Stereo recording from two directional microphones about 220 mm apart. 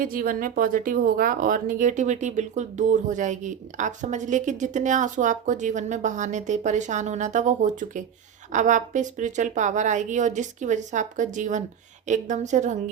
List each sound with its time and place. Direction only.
0.0 s speech: 40° right (ahead or behind)